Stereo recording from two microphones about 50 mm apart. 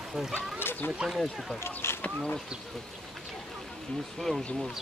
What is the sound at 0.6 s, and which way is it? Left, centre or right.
Speech, left.